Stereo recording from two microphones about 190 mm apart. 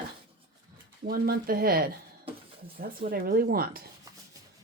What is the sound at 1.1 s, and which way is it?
Speech, 50° right (ahead or behind).